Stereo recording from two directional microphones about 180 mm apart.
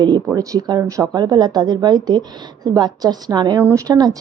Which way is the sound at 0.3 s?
20° right (ahead or behind).